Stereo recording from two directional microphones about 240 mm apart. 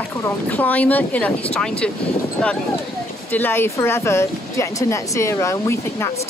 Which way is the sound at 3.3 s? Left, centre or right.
Centre.